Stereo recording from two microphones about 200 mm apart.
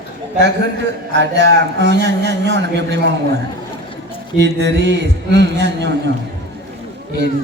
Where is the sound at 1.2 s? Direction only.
60° right (ahead or behind).